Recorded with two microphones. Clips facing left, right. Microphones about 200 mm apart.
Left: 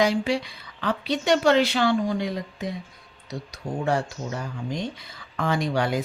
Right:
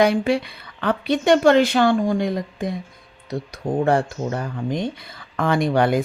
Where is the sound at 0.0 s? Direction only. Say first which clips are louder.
Right 5 dB; 55° right (ahead or behind).